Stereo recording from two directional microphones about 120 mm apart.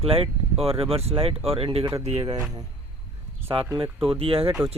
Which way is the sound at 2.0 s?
65° right (ahead or behind).